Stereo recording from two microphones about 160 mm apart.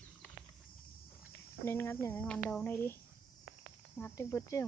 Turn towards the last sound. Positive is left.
turn(degrees=20)  # may be behind; listen again after turning